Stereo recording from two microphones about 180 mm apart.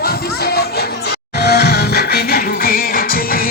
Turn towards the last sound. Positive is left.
turn(degrees=55)  # may be behind; listen again after turning